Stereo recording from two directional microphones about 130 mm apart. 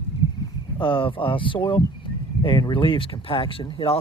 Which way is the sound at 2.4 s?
40° left (ahead or behind).